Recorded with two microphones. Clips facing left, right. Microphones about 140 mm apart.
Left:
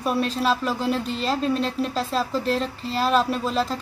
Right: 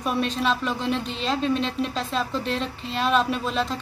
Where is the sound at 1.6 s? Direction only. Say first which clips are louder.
Left 2 dB; 40° left (ahead or behind).